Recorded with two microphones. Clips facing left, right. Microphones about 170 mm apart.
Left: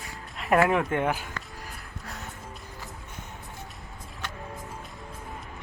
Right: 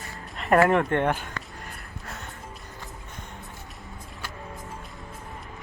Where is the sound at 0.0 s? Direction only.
Centre (ahead or behind).